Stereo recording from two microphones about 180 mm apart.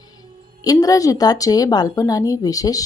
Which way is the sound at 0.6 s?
20° left (ahead or behind).